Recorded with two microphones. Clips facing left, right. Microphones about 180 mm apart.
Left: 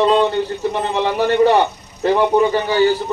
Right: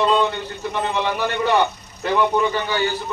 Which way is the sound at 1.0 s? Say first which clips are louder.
Left 8 dB; 35° left (ahead or behind).